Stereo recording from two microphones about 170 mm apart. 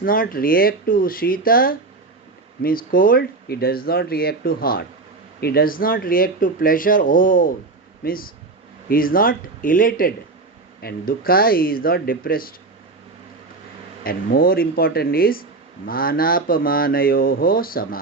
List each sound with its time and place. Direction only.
0.0 s speech: 55° left (ahead or behind)
14.0 s speech: 60° left (ahead or behind)